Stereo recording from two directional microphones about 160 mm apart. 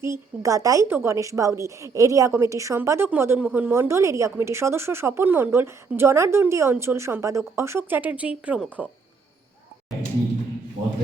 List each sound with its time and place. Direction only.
0.0 s a woman's voice: 20° right (ahead or behind)